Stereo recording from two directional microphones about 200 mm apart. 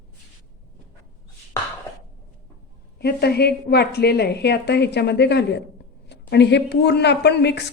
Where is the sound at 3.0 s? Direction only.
50° left (ahead or behind).